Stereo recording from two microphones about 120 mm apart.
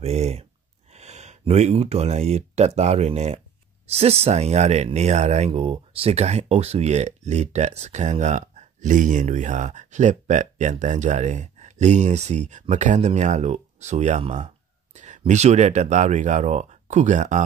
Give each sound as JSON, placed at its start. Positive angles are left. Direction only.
{"t": 0.0, "sound": "speech", "side_deg": -65}